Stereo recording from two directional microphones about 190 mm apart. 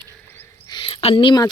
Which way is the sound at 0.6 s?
25° left (ahead or behind).